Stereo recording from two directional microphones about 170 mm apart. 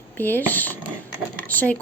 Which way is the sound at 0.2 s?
10° left (ahead or behind).